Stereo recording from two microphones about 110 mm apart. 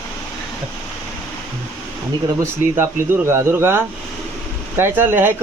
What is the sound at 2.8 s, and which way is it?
Speech, 25° right (ahead or behind).